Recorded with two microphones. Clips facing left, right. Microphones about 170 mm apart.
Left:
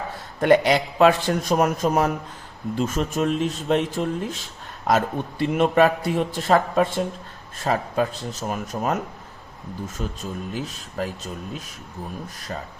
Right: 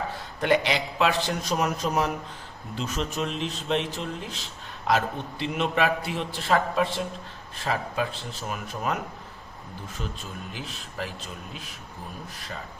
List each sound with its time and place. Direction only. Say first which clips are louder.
0.3 s a man's voice: left 7 dB; 45° left (ahead or behind)